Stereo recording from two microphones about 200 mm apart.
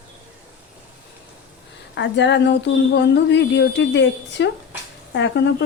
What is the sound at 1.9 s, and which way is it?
Speech, 60° left (ahead or behind).